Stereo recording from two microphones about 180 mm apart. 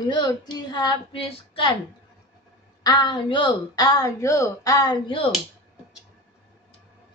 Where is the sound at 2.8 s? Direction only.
20° left (ahead or behind).